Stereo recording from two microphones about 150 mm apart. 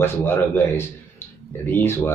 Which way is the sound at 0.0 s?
15° left (ahead or behind).